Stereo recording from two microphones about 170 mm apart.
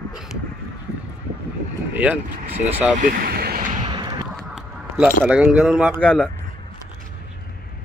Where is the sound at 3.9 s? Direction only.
25° right (ahead or behind).